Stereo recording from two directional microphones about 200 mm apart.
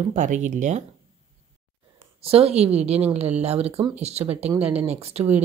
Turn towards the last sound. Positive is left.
turn(degrees=-30)  # may be behind; listen again after turning